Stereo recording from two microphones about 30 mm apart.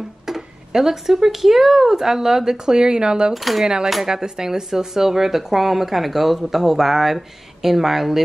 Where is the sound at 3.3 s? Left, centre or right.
Centre.